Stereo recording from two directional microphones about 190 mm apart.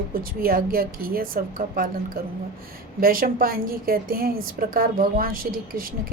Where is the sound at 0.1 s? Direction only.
50° right (ahead or behind).